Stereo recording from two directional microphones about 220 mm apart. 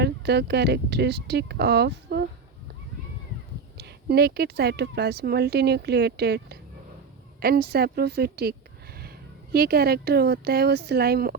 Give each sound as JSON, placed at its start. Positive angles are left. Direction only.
{"t": 0.0, "sound": "speech", "side_deg": -50}
{"t": 3.8, "sound": "speech", "side_deg": -45}